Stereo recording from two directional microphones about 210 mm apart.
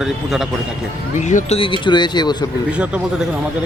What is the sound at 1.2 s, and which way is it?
Speech, 35° left (ahead or behind).